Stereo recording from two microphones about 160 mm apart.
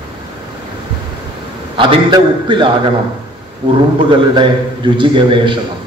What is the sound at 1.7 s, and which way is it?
Speech, 30° right (ahead or behind).